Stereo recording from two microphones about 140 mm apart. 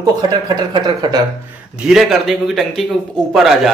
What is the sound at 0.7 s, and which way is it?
Speech, 30° right (ahead or behind).